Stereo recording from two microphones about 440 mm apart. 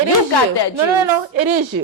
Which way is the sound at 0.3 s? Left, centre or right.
Left.